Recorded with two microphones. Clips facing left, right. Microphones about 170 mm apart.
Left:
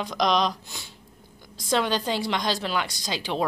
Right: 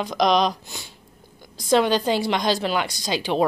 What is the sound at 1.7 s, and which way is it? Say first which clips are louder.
A woman's voice: right 6 dB; 10° right (ahead or behind).